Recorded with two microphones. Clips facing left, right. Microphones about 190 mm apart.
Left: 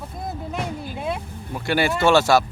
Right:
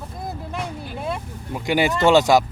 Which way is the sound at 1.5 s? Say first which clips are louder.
Right 1 dB; 15° right (ahead or behind).